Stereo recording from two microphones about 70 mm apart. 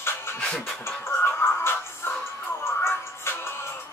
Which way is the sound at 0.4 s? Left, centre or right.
Centre.